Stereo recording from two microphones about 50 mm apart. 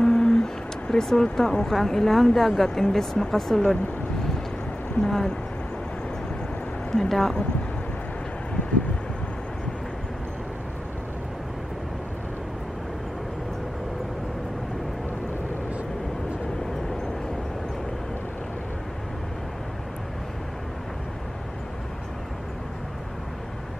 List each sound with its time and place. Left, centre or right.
0.0 s speech: centre
5.0 s speech: centre
6.9 s speech: centre